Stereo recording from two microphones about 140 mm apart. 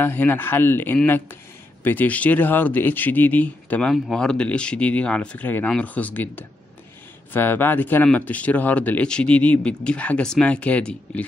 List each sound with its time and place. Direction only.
0.0 s a man's voice: 15° left (ahead or behind)